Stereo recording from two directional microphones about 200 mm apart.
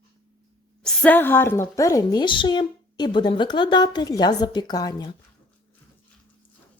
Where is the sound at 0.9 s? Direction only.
10° left (ahead or behind).